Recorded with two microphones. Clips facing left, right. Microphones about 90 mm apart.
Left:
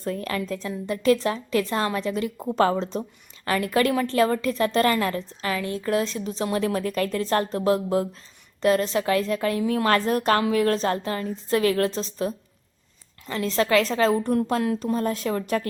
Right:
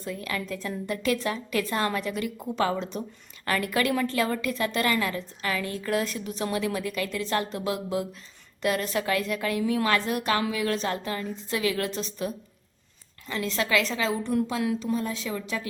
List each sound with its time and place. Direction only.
0.0 s a woman's voice: 40° left (ahead or behind)
8.6 s a woman's voice: 30° left (ahead or behind); by 15.6 s 50° left (ahead or behind)